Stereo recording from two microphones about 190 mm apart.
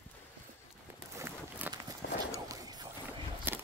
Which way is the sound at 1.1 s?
15° right (ahead or behind).